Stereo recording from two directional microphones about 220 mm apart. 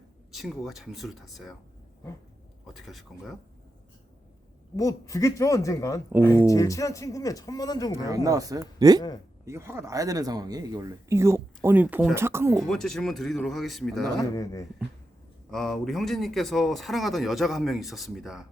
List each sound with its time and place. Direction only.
0.3 s speech: centre (ahead or behind)
2.7 s speech: centre (ahead or behind)
4.8 s speech: 15° left (ahead or behind)
7.9 s a man's voice: 15° right (ahead or behind)
12.5 s speech: centre (ahead or behind)
14.3 s speech: 15° left (ahead or behind)
15.4 s speech: centre (ahead or behind)